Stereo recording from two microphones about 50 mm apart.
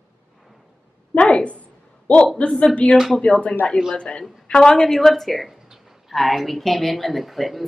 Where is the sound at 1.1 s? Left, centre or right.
Left.